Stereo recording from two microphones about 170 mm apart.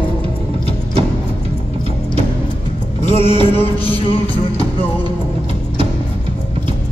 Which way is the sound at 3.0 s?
35° left (ahead or behind).